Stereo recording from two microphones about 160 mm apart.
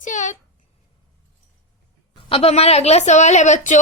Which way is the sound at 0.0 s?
50° left (ahead or behind).